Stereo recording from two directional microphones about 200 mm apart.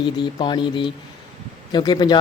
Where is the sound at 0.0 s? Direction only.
25° left (ahead or behind).